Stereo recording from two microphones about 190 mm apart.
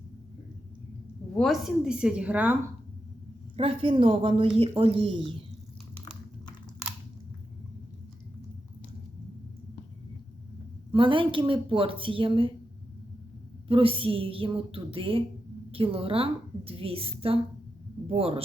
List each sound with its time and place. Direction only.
1.4 s a woman's voice: centre (ahead or behind)
3.6 s a woman's voice: 30° right (ahead or behind)
10.9 s a woman's voice: 25° right (ahead or behind)
13.7 s a woman's voice: 30° right (ahead or behind)